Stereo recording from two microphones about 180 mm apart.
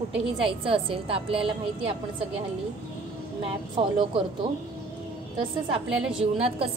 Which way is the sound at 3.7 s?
25° right (ahead or behind).